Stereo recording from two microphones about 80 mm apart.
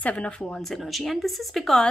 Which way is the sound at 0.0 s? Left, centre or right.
Centre.